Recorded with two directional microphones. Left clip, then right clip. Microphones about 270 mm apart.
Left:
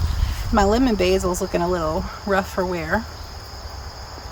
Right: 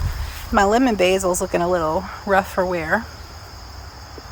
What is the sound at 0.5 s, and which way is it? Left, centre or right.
Speech, centre.